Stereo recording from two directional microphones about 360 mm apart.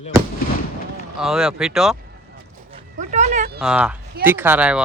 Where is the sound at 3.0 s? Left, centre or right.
Centre.